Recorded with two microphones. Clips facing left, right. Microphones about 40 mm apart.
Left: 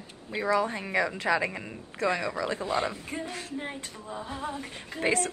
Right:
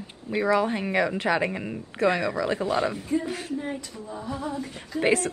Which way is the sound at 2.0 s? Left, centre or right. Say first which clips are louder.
Right 5 dB; right.